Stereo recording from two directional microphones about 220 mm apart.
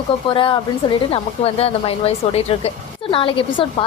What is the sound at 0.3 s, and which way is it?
Speech, 25° left (ahead or behind).